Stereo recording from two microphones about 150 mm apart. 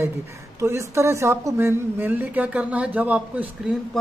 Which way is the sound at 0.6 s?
20° right (ahead or behind).